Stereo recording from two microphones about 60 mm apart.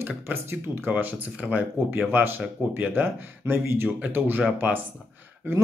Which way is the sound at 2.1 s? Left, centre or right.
Right.